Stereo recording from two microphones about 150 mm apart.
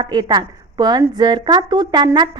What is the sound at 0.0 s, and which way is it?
A woman's voice, 30° right (ahead or behind).